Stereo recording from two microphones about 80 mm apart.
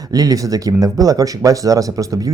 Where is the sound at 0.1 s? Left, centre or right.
Right.